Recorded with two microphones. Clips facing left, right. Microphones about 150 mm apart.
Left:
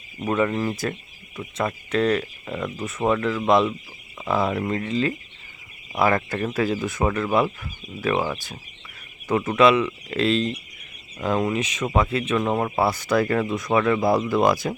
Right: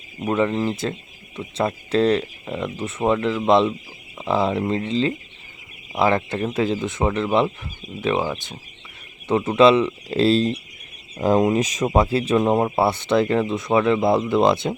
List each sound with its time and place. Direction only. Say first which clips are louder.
0.2 s speech: right 2 dB; 15° right (ahead or behind); by 12.4 s 35° right (ahead or behind)
12.4 s speech: right 3 dB; 20° right (ahead or behind)